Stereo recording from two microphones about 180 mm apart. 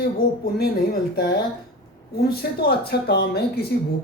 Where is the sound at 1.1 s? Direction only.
65° left (ahead or behind).